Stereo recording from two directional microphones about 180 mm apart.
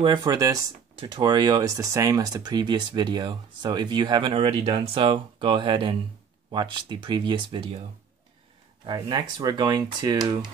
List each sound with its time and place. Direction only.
0.0 s speech: 25° right (ahead or behind)
8.8 s speech: 20° right (ahead or behind)